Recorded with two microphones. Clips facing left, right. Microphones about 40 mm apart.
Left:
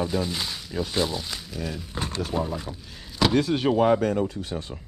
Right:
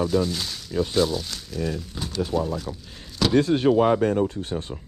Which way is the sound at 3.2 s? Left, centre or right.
Centre.